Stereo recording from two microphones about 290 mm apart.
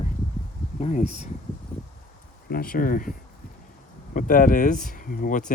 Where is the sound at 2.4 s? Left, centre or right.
Left.